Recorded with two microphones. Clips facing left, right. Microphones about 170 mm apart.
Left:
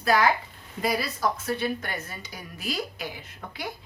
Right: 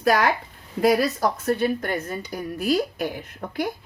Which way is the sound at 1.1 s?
40° right (ahead or behind).